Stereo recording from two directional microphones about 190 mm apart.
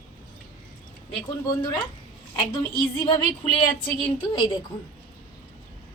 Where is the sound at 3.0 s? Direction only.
25° left (ahead or behind).